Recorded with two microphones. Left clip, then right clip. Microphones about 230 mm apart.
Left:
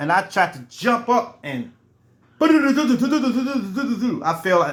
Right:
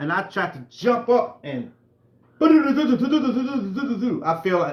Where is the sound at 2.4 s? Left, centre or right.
Centre.